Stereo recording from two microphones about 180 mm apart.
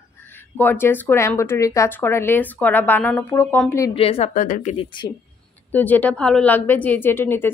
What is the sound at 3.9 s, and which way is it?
Speech, 30° left (ahead or behind).